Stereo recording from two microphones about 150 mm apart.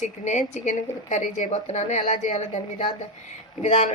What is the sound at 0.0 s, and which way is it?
Speech, 50° left (ahead or behind).